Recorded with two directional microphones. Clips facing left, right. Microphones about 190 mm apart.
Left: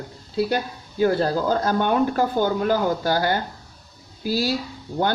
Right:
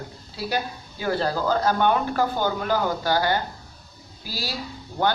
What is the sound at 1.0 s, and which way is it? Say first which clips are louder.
Speech: left 5 dB; 45° left (ahead or behind).